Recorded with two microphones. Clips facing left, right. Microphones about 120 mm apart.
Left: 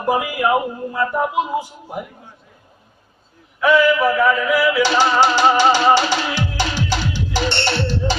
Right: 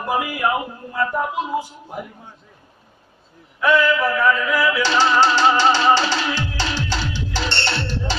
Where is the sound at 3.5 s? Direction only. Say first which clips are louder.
Left 3 dB; 10° left (ahead or behind).